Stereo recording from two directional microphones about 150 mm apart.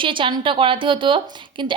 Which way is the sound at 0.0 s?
35° right (ahead or behind).